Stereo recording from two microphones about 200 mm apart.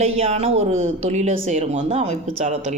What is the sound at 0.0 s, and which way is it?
Speech, 30° right (ahead or behind).